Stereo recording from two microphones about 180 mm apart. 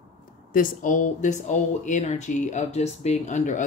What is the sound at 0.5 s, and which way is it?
Speech, 45° left (ahead or behind).